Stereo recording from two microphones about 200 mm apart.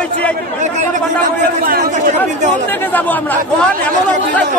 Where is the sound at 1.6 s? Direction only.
45° right (ahead or behind).